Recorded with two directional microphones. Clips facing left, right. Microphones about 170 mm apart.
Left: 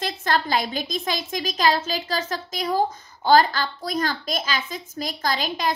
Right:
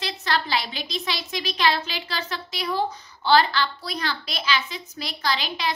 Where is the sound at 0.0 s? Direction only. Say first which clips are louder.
Left 3 dB; 45° left (ahead or behind).